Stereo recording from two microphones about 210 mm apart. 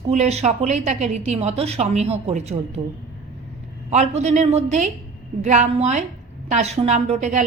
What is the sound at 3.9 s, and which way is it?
Speech, 30° right (ahead or behind).